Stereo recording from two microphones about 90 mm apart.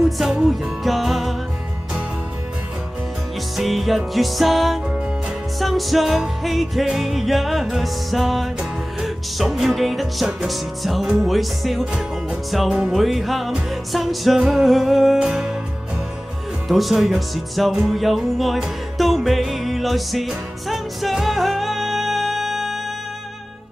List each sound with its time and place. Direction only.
0.0 s music: 5° right (ahead or behind)
3.5 s music: centre (ahead or behind)
16.6 s music: centre (ahead or behind)